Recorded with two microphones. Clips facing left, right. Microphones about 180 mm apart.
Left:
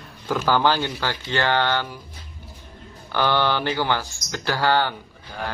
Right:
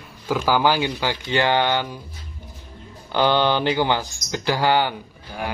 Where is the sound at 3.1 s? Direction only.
20° right (ahead or behind).